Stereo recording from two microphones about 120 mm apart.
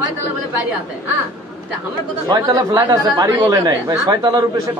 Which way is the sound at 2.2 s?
30° right (ahead or behind).